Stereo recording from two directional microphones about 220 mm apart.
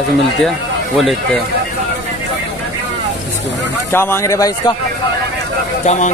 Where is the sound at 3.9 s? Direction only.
10° left (ahead or behind).